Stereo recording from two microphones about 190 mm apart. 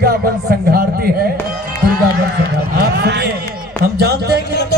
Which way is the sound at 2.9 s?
60° right (ahead or behind).